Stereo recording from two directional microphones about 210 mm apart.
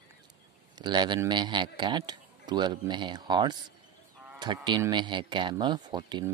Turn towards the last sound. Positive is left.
turn(degrees=-20)  # may be behind; listen again after turning